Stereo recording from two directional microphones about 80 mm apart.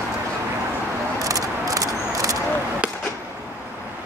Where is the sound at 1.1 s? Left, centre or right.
Right.